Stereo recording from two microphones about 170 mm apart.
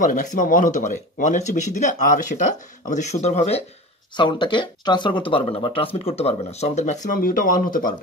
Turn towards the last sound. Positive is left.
turn(degrees=55)  # may be behind; listen again after turning